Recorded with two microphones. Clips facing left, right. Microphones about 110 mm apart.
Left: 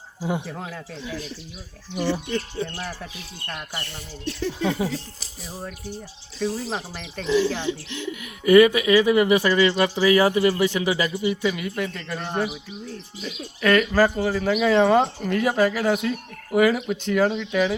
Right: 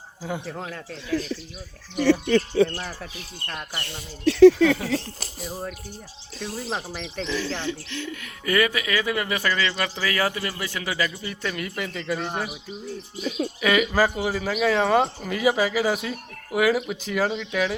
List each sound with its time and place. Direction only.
0.2 s speech: 20° left (ahead or behind)
0.4 s speech: 5° left (ahead or behind)
2.2 s speech: 80° right
2.7 s speech: centre (ahead or behind)
4.3 s speech: 85° right
5.4 s speech: centre (ahead or behind)
7.3 s speech: 15° left (ahead or behind)
11.5 s speech: centre (ahead or behind)
13.6 s speech: 5° right (ahead or behind)